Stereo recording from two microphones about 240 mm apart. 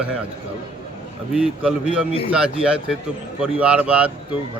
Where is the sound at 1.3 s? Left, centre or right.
Centre.